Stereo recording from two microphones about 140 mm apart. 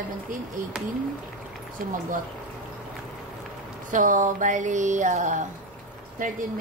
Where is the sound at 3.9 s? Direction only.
65° right (ahead or behind).